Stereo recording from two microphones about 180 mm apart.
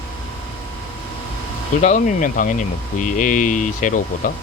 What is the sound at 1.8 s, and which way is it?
Speech, 40° left (ahead or behind).